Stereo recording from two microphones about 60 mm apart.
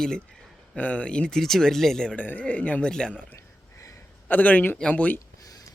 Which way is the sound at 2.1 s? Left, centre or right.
Left.